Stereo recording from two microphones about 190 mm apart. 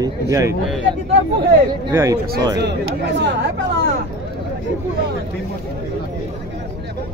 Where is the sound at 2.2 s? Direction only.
55° right (ahead or behind).